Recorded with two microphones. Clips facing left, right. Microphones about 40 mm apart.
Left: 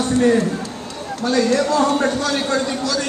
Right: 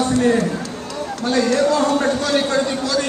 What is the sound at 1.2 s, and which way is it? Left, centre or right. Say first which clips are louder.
Speech: even; right.